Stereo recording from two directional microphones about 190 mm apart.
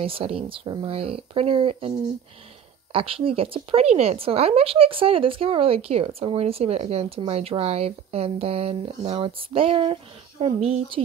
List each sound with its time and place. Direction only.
0.0 s speech: 30° right (ahead or behind)